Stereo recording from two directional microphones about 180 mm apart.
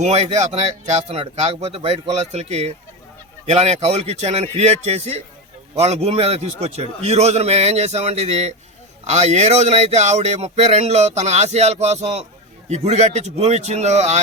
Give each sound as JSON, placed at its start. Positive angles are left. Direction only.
{"t": 0.0, "sound": "speech", "side_deg": -35}